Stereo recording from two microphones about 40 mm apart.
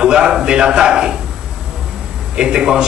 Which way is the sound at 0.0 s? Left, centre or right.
Centre.